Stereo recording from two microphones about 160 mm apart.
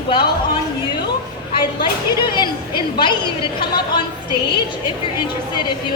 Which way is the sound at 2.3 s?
30° left (ahead or behind).